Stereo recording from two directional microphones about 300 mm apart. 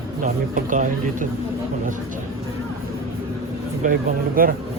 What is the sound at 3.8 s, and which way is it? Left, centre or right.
Speech, right.